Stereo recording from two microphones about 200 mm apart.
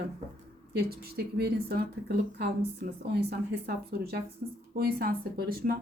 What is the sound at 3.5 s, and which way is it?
Speech, 50° right (ahead or behind).